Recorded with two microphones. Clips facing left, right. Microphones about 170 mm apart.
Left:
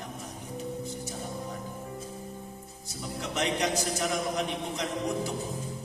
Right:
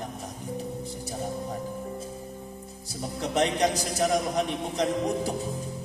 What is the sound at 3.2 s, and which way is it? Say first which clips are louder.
A man's voice: right 5 dB; 35° right (ahead or behind).